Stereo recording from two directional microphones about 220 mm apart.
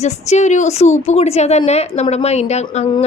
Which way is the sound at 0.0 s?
30° left (ahead or behind).